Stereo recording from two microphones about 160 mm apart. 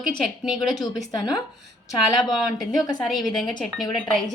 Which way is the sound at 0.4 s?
Centre (ahead or behind).